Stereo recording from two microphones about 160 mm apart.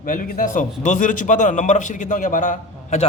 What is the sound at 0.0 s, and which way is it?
A man's voice, 55° left (ahead or behind).